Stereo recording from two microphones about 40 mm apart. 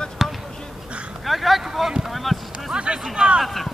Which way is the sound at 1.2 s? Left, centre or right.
Centre.